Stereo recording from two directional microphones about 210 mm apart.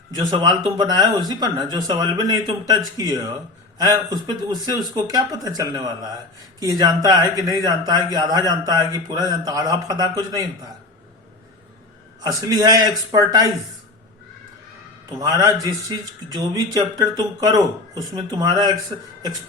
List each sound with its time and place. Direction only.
0.3 s speech: 20° right (ahead or behind)
12.2 s speech: 20° right (ahead or behind)
15.1 s speech: 15° right (ahead or behind)